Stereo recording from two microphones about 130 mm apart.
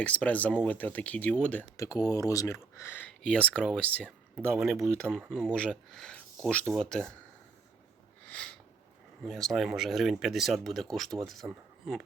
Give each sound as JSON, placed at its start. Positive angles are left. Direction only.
{"t": 0.0, "sound": "speech", "side_deg": 10}
{"t": 1.7, "sound": "speech", "side_deg": 25}
{"t": 8.3, "sound": "a sound", "side_deg": 10}
{"t": 9.2, "sound": "speech", "side_deg": 0}